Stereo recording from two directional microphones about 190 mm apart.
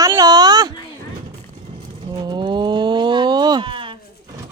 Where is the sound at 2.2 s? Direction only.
25° right (ahead or behind).